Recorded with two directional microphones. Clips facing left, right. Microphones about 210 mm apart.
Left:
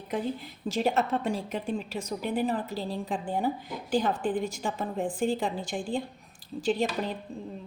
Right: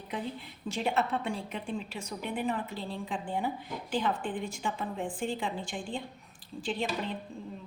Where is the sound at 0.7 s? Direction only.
40° left (ahead or behind).